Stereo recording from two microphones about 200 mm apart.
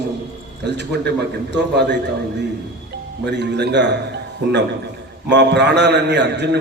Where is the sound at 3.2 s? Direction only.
60° right (ahead or behind).